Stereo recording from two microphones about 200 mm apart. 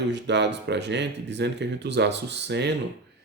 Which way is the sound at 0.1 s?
60° right (ahead or behind).